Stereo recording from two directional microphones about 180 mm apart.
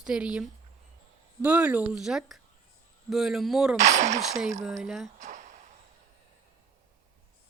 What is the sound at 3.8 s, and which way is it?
Speech, 40° right (ahead or behind).